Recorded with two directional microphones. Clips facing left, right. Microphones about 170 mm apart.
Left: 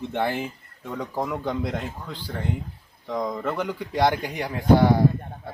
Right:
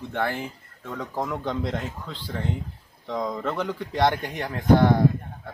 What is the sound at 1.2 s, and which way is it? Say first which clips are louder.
A man's voice: left 1 dB; 5° left (ahead or behind).